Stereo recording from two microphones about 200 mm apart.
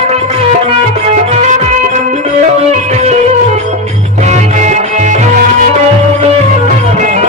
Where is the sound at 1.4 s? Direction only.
35° right (ahead or behind).